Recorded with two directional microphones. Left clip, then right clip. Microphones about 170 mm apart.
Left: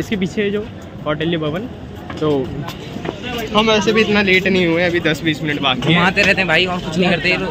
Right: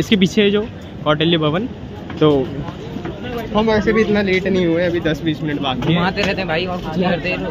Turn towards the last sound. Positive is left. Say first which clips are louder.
# left 3 dB
turn(degrees=10)  # may be behind; listen again after turning